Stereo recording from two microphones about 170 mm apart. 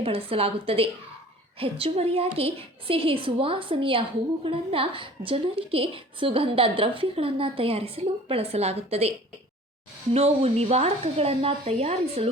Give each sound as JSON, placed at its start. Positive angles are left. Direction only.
{"t": 0.0, "sound": "a woman's voice", "side_deg": -35}